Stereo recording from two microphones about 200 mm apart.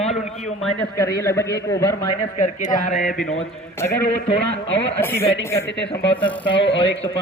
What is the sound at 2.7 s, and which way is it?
Speech, 40° left (ahead or behind).